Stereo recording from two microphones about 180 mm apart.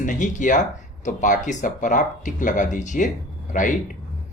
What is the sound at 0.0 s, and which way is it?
Speech, 45° left (ahead or behind).